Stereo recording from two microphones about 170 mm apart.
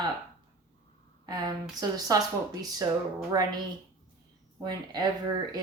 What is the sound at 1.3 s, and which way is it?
Speech, 20° right (ahead or behind).